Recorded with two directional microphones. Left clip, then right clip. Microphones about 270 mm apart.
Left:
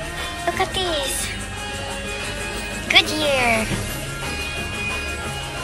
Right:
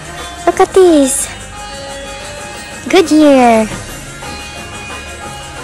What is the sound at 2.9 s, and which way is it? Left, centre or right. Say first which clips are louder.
Speech: right 9 dB; centre.